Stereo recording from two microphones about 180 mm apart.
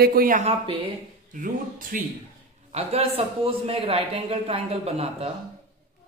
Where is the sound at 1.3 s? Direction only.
50° right (ahead or behind).